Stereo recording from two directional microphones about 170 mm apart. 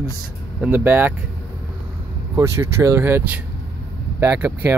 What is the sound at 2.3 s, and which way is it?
Speech, 15° right (ahead or behind).